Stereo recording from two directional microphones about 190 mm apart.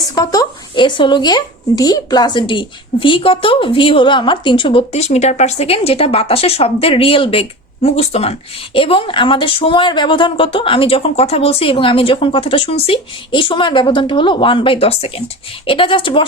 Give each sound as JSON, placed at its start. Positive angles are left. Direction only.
{"t": 0.1, "sound": "speech", "side_deg": 20}